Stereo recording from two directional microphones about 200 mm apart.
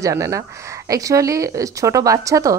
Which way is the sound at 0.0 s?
15° right (ahead or behind).